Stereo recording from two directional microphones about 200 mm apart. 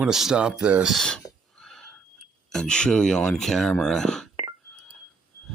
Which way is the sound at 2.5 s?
5° left (ahead or behind).